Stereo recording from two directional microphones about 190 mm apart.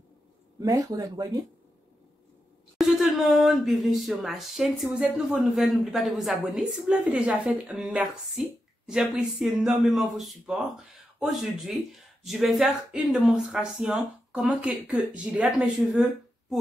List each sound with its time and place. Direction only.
0.6 s speech: 15° right (ahead or behind)
2.8 s speech: centre (ahead or behind)